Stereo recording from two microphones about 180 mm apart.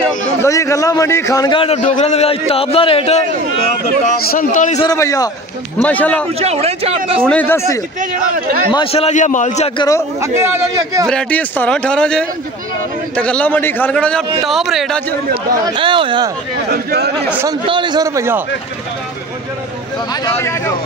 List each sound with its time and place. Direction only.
0.4 s a man's voice: 15° left (ahead or behind); by 3.2 s 35° left (ahead or behind)
4.3 s a man's voice: 45° left (ahead or behind)
4.7 s a man's voice: 20° left (ahead or behind)
6.4 s speech: 35° right (ahead or behind)
7.2 s a man's voice: 10° left (ahead or behind)
8.0 s a man's voice: 55° right (ahead or behind)
8.7 s a man's voice: 35° left (ahead or behind)
9.8 s a man's voice: 20° left (ahead or behind)
10.2 s a man's voice: 15° right (ahead or behind)
11.1 s a man's voice: 5° left (ahead or behind)
15.7 s a man's voice: 30° right (ahead or behind)
16.7 s a man's voice: 60° right (ahead or behind)
17.5 s a man's voice: 25° right (ahead or behind)
20.2 s a man's voice: 15° left (ahead or behind)